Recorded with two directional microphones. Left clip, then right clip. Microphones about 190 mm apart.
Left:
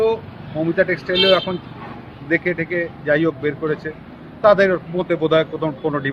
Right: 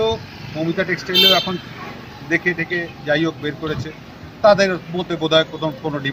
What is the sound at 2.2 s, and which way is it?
Speech, 5° left (ahead or behind).